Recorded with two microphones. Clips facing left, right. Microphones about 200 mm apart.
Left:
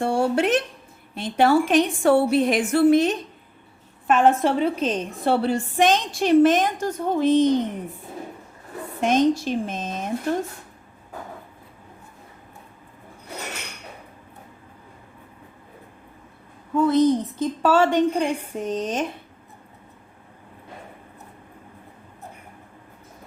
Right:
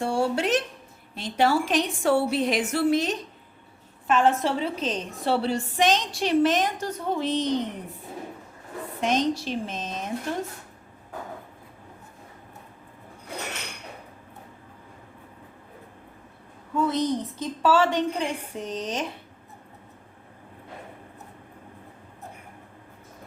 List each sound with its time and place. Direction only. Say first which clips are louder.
0.0 s a sound: left 4 dB; 55° left (ahead or behind)
1.1 s a woman's voice: left 5 dB; 55° left (ahead or behind)
9.0 s a woman's voice: left 5 dB; 50° left (ahead or behind)
16.7 s a woman's voice: left 7 dB; 55° left (ahead or behind)